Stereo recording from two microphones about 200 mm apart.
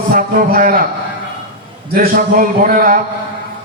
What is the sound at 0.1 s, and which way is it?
Speech, 45° right (ahead or behind).